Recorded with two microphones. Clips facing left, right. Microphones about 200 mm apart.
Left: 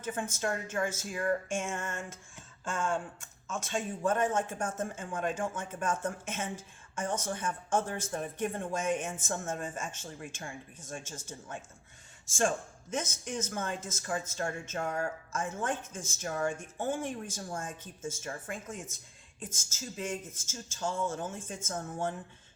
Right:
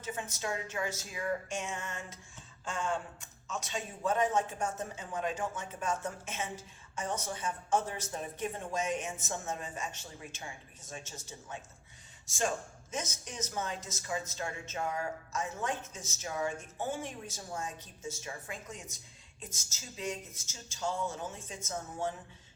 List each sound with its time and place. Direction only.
0.0 s speech: 50° left (ahead or behind)